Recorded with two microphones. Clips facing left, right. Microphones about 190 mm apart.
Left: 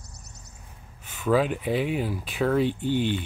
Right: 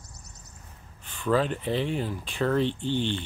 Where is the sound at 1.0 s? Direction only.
10° left (ahead or behind).